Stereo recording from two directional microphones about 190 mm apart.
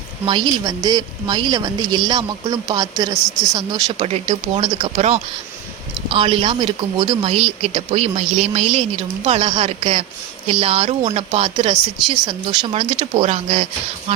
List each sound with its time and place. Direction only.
0.3 s speech: 25° right (ahead or behind)
3.9 s speech: 35° right (ahead or behind)